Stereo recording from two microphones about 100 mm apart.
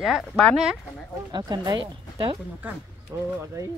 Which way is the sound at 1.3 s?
45° right (ahead or behind).